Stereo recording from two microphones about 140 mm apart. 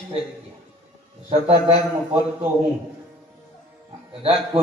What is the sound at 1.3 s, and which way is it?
Speech, 45° right (ahead or behind).